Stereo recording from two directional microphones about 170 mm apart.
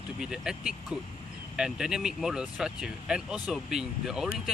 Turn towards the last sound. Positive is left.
turn(degrees=0)  # may be behind; listen again after turning